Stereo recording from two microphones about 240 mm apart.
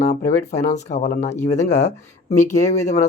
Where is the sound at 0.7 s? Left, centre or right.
Left.